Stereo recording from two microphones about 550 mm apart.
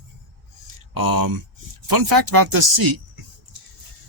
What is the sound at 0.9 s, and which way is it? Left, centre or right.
Speech, right.